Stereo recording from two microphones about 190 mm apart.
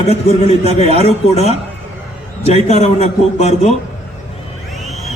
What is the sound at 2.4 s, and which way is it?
A man's voice, 35° left (ahead or behind).